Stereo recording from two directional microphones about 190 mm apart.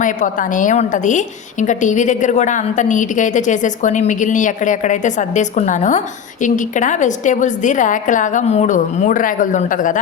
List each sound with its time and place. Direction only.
0.0 s a woman's voice: 45° left (ahead or behind)